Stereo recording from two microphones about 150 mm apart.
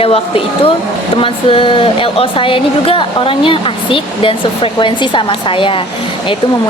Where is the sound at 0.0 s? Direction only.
40° left (ahead or behind).